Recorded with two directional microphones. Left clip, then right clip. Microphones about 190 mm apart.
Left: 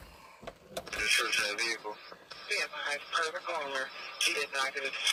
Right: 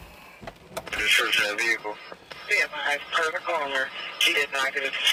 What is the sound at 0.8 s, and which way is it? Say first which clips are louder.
Radio: right 7 dB; 10° right (ahead or behind).